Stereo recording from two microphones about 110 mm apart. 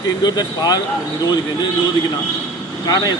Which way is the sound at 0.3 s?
40° left (ahead or behind).